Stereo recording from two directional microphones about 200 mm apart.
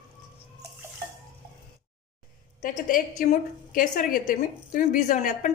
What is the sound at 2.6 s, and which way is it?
A woman's voice, 45° left (ahead or behind).